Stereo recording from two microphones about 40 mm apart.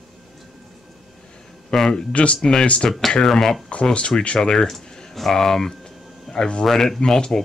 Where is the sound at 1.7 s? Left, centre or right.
Centre.